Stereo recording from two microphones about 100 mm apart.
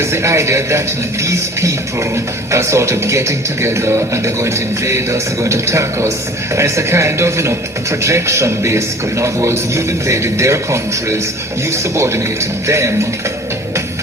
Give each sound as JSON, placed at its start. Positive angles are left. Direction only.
{"t": 0.0, "sound": "speech", "side_deg": -30}